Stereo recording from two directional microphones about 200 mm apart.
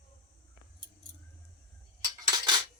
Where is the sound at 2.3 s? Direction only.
20° right (ahead or behind).